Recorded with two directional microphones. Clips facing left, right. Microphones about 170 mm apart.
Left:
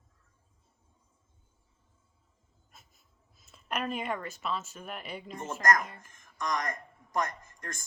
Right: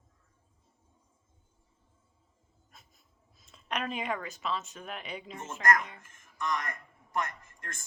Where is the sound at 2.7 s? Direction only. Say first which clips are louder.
Even; centre (ahead or behind).